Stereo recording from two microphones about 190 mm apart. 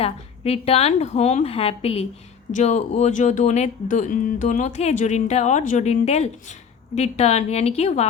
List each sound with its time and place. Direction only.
0.0 s speech: 30° left (ahead or behind)